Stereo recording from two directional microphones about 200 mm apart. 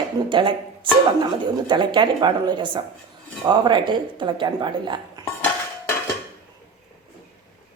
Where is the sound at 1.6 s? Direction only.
25° right (ahead or behind).